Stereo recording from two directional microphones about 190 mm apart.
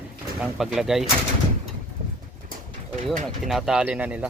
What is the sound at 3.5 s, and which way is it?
Speech, centre (ahead or behind).